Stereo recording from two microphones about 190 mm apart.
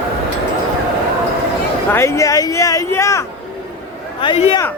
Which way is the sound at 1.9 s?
15° left (ahead or behind).